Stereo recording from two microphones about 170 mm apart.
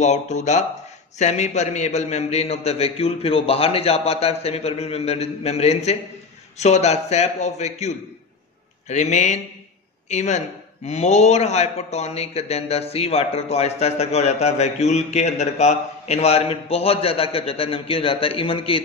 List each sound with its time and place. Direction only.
0.0 s a man's voice: 40° left (ahead or behind)